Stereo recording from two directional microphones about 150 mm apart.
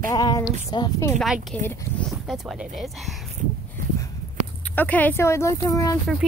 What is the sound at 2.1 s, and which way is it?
Speech, centre (ahead or behind).